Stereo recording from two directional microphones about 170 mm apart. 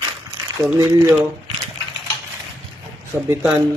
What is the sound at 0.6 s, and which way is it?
Speech, 20° right (ahead or behind).